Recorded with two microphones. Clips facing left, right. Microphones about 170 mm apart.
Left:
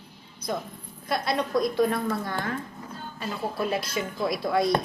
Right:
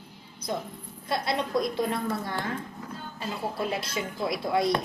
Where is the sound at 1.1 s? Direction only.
25° right (ahead or behind).